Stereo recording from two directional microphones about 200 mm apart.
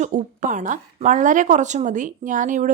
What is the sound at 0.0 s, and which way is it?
A woman's voice, 40° right (ahead or behind).